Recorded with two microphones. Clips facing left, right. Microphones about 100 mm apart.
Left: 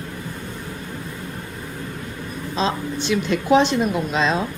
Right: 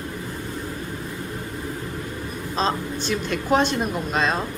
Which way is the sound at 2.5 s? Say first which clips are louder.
Left 1 dB; 40° right (ahead or behind).